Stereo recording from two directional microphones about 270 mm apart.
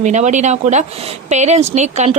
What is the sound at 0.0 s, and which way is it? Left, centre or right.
Speech, right.